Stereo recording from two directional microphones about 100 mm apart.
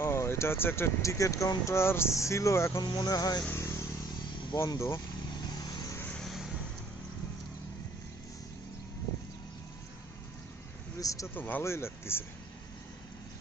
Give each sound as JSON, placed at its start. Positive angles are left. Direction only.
{"t": 0.0, "sound": "speech", "side_deg": 25}
{"t": 2.8, "sound": "speech", "side_deg": 40}
{"t": 3.5, "sound": "motorcycle", "side_deg": 30}
{"t": 4.5, "sound": "speech", "side_deg": 40}
{"t": 5.4, "sound": "vehicle", "side_deg": 45}
{"t": 6.1, "sound": "vehicle", "side_deg": 0}
{"t": 11.0, "sound": "speech", "side_deg": 35}
{"t": 11.3, "sound": "speech", "side_deg": 20}